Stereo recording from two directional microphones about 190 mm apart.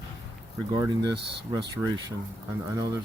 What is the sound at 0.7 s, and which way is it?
Speech, 20° right (ahead or behind).